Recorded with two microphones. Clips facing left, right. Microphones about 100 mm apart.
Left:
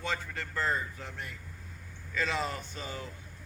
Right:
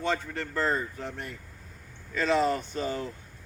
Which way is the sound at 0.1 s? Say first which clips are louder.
Right 5 dB; 35° right (ahead or behind).